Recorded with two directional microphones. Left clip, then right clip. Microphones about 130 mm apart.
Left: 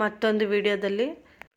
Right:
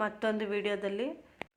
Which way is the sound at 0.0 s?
30° left (ahead or behind).